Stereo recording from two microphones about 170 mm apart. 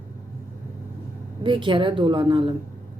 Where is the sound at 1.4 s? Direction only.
30° right (ahead or behind).